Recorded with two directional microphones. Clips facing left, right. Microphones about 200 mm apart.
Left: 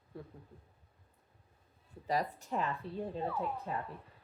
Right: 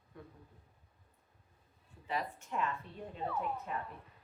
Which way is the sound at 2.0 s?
40° left (ahead or behind).